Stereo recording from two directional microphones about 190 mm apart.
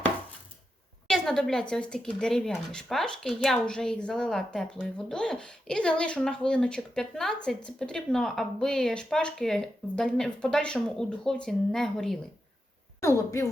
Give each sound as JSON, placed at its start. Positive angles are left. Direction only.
{"t": 1.0, "sound": "speech", "side_deg": 0}
{"t": 13.0, "sound": "a woman's voice", "side_deg": 15}